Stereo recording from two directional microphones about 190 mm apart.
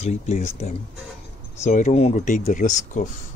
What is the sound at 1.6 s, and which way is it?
Speech, 35° left (ahead or behind).